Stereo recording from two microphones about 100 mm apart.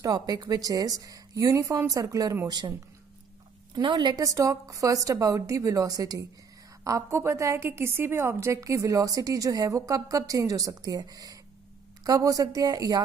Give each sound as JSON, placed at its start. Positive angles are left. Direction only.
{"t": 0.0, "sound": "a woman's voice", "side_deg": -40}
{"t": 3.7, "sound": "a woman's voice", "side_deg": -50}
{"t": 4.2, "sound": "a woman's voice", "side_deg": -35}